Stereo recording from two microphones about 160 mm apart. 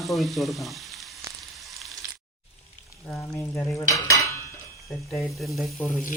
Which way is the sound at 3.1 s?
10° left (ahead or behind).